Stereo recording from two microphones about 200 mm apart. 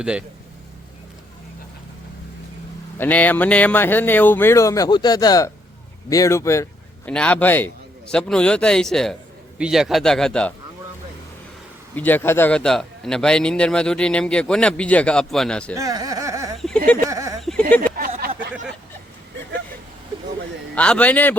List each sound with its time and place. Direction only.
0.0 s a man's voice: 5° right (ahead or behind)
3.0 s a man's voice: 10° left (ahead or behind)
11.9 s a man's voice: 10° left (ahead or behind)
15.7 s speech: 15° right (ahead or behind)
16.6 s a sound: 5° left (ahead or behind)
17.1 s speech: 15° right (ahead or behind)
20.7 s speech: 5° left (ahead or behind)